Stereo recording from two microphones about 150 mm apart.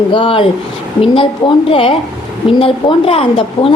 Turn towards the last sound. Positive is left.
turn(degrees=40)  # may be behind; listen again after turning